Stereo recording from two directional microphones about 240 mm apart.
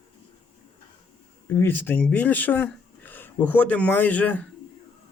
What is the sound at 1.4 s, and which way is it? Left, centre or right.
Speech, centre.